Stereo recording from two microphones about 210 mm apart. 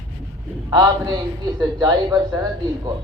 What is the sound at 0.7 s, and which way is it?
A man's voice, 20° right (ahead or behind).